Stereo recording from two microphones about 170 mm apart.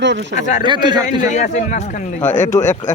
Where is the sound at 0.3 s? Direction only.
45° left (ahead or behind).